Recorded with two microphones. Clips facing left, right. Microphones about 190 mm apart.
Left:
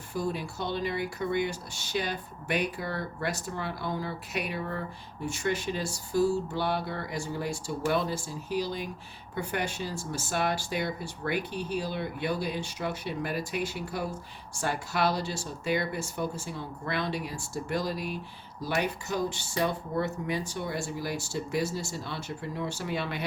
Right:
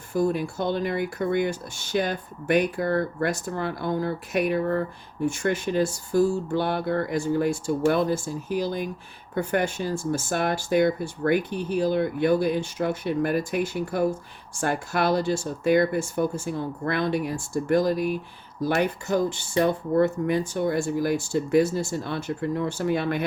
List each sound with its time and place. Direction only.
0.1 s speech: 50° right (ahead or behind)